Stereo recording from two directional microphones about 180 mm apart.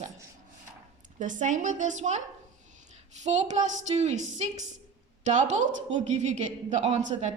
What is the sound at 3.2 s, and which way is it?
A woman's voice, 40° right (ahead or behind).